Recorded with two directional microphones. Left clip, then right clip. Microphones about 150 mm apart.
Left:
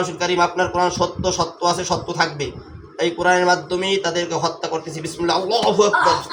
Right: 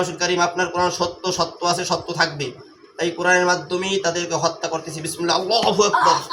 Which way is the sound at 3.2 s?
20° left (ahead or behind).